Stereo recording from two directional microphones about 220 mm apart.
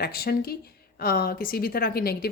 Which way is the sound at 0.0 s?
45° left (ahead or behind).